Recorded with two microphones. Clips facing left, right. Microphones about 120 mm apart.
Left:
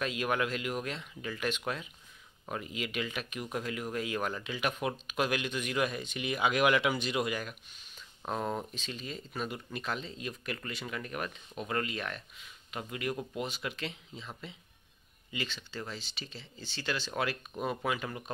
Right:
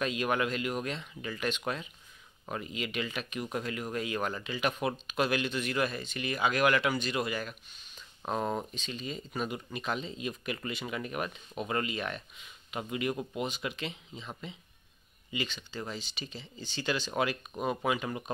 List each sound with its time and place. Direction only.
0.0 s speech: centre (ahead or behind)